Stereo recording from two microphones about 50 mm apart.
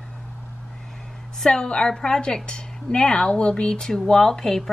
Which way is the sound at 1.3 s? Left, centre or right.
Centre.